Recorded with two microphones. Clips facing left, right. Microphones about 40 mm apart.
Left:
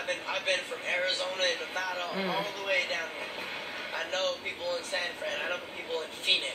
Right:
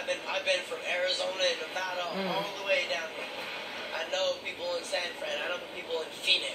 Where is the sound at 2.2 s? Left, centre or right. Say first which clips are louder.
Left 1 dB; centre.